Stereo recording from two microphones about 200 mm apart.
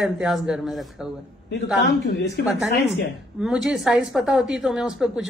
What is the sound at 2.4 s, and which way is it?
Speech, 50° left (ahead or behind).